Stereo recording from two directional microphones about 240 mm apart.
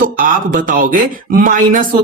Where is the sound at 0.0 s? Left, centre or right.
Right.